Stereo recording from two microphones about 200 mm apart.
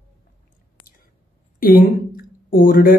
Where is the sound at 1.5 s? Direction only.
45° left (ahead or behind).